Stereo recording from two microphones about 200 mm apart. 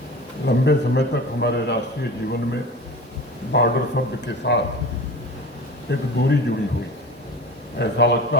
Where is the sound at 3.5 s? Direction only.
55° left (ahead or behind).